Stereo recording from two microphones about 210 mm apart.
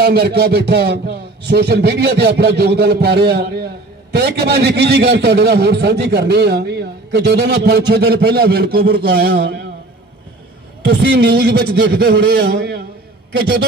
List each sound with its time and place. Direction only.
0.0 s a man's voice: 50° right (ahead or behind)
10.9 s a man's voice: 50° right (ahead or behind)